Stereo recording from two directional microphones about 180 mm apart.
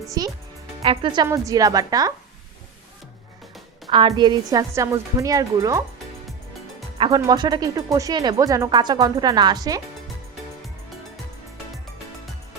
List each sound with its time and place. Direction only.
0.2 s speech: 20° right (ahead or behind)
3.8 s speech: 25° right (ahead or behind)
7.0 s speech: 25° right (ahead or behind)